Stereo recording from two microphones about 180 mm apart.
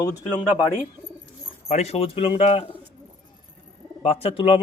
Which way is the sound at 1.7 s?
35° left (ahead or behind).